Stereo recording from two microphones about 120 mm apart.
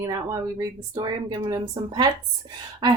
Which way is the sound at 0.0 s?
30° right (ahead or behind).